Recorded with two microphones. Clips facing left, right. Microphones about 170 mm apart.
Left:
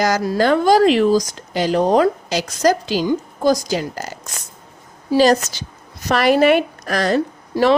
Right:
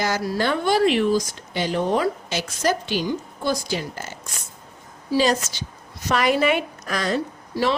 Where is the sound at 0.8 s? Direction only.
90° left.